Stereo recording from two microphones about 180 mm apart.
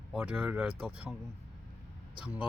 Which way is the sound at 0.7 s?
30° right (ahead or behind).